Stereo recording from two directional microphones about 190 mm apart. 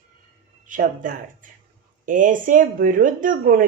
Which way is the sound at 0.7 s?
45° right (ahead or behind).